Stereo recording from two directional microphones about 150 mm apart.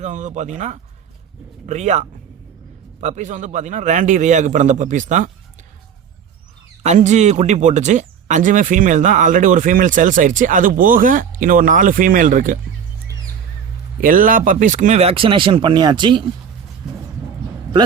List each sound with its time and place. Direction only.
0.0 s a man's voice: 55° right (ahead or behind)
6.8 s speech: 50° right (ahead or behind)
14.0 s speech: 65° right (ahead or behind); by 16.2 s 30° right (ahead or behind)